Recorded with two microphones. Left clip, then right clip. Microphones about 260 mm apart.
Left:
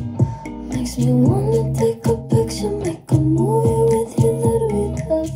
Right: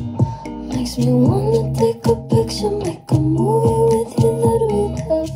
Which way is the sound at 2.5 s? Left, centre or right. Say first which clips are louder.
Right 3 dB; centre.